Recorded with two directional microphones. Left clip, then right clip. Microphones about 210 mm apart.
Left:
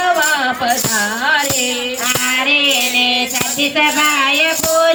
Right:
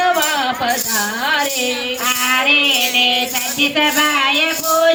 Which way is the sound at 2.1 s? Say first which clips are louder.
Right 1 dB; 20° left (ahead or behind).